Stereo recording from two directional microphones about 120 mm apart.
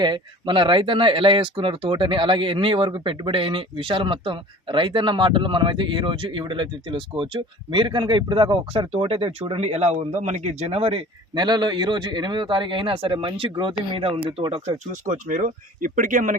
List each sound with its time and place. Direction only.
0.0 s speech: 40° right (ahead or behind)
11.3 s speech: 35° right (ahead or behind)
15.0 s speech: 90° right